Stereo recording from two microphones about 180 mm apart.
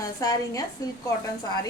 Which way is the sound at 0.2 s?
20° left (ahead or behind).